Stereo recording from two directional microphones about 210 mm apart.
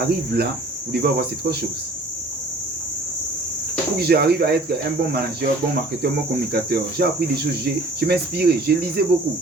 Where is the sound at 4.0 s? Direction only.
50° right (ahead or behind).